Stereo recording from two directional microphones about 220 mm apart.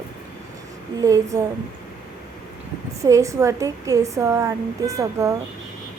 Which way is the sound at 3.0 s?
15° right (ahead or behind).